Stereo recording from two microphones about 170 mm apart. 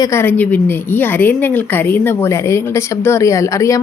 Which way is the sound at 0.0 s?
15° left (ahead or behind).